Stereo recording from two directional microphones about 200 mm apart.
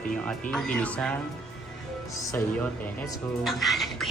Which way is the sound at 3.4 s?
Centre (ahead or behind).